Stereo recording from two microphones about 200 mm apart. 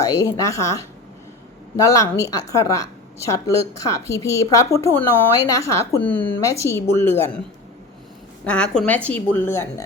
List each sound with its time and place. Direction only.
0.0 s a woman's voice: 15° left (ahead or behind)
8.4 s a woman's voice: 5° left (ahead or behind)